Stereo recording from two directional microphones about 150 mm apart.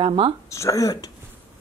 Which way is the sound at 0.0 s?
35° right (ahead or behind).